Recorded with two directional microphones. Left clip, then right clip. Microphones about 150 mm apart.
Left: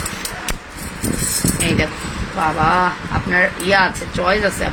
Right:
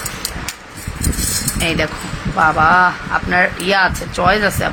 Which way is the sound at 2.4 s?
40° right (ahead or behind).